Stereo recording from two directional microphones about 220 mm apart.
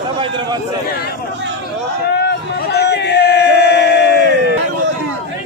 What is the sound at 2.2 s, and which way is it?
Crowd, 50° left (ahead or behind).